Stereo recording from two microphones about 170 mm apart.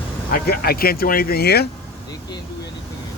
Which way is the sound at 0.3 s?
65° left (ahead or behind).